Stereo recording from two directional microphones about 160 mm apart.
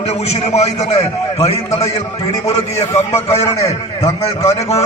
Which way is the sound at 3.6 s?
45° left (ahead or behind).